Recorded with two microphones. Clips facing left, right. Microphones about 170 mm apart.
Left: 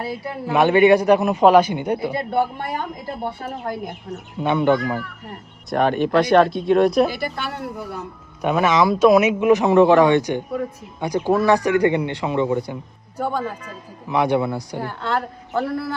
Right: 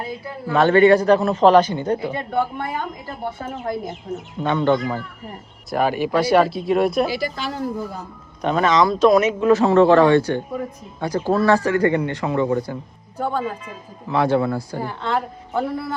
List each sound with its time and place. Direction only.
0.4 s speech: 15° left (ahead or behind)
4.4 s speech: 10° left (ahead or behind)
5.7 s speech: 5° right (ahead or behind)
7.1 s a woman's voice: 60° left (ahead or behind)
8.4 s speech: 10° left (ahead or behind)
14.8 s speech: centre (ahead or behind)